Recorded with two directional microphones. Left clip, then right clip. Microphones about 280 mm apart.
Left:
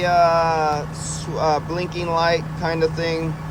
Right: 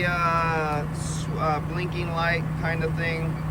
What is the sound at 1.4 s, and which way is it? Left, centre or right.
Speech, centre.